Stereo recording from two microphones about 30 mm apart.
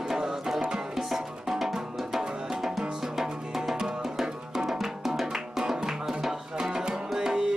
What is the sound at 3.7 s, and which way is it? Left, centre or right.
Music, centre.